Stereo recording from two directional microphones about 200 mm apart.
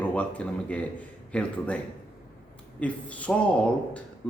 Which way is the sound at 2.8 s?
5° left (ahead or behind).